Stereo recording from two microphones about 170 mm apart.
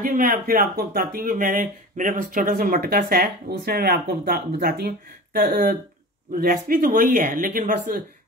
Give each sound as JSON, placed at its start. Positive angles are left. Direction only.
{"t": 0.0, "sound": "speech", "side_deg": -55}